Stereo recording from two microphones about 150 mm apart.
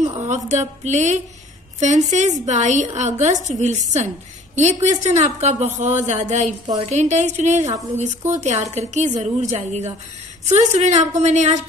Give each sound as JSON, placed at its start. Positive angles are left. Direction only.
{"t": 0.3, "sound": "speech", "side_deg": -50}